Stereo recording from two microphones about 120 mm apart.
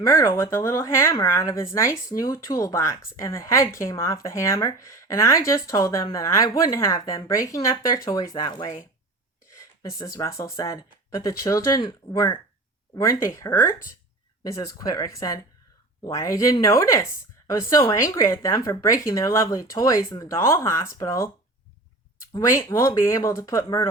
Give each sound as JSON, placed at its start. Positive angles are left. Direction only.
{"t": 0.0, "sound": "speech", "side_deg": 25}
{"t": 12.0, "sound": "speech", "side_deg": 40}
{"t": 13.1, "sound": "speech", "side_deg": 25}
{"t": 22.4, "sound": "speech", "side_deg": 25}